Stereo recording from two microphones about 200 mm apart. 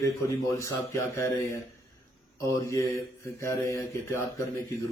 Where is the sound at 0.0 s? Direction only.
15° left (ahead or behind).